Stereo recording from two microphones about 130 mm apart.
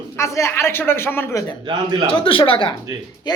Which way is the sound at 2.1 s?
45° left (ahead or behind).